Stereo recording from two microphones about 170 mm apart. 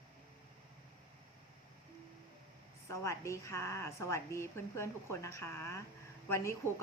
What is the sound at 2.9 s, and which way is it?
A woman's voice, 15° left (ahead or behind).